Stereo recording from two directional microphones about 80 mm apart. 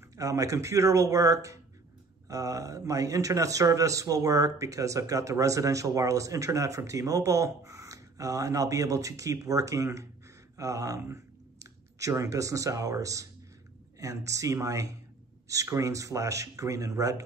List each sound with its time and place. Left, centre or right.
0.1 s speech: right